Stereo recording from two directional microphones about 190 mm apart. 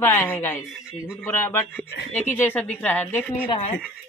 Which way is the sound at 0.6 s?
5° right (ahead or behind).